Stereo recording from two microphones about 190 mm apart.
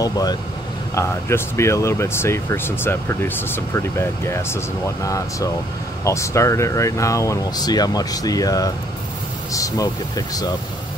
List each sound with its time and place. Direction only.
0.0 s speech: 20° left (ahead or behind)